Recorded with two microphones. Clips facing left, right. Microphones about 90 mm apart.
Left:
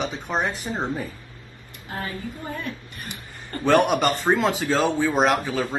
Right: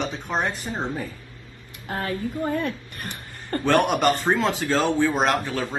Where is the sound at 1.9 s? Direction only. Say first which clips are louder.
Right 3 dB; 50° right (ahead or behind).